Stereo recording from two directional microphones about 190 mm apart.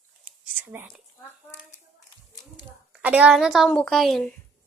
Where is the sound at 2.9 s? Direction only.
5° right (ahead or behind).